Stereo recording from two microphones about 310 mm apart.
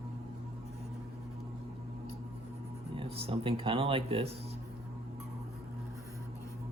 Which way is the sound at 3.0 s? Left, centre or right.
Centre.